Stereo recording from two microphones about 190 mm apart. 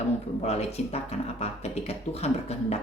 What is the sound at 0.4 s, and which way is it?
Speech, 35° left (ahead or behind).